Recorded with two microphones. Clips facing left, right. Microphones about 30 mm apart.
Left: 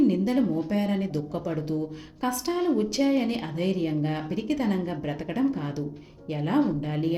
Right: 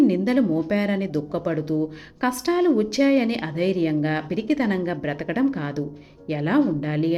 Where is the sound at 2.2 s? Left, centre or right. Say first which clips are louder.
Right 6 dB; right.